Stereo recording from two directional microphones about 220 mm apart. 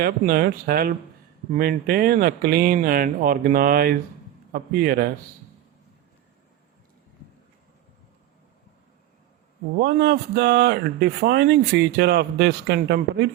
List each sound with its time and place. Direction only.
0.0 s speech: 45° right (ahead or behind)
9.7 s speech: 50° right (ahead or behind)